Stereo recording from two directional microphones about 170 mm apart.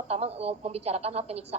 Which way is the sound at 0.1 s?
35° right (ahead or behind).